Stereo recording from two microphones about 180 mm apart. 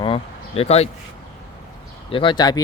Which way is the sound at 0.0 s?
30° left (ahead or behind).